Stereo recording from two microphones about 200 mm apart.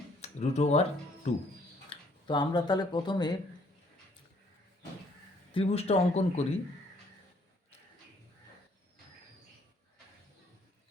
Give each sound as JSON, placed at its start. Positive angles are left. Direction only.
{"t": 0.2, "sound": "speech", "side_deg": 35}
{"t": 1.9, "sound": "speech", "side_deg": 25}
{"t": 5.5, "sound": "speech", "side_deg": 30}